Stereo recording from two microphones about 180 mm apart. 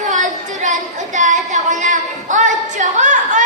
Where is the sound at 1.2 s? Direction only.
45° right (ahead or behind).